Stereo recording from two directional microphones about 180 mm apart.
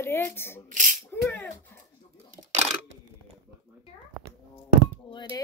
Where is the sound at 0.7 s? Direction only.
45° right (ahead or behind).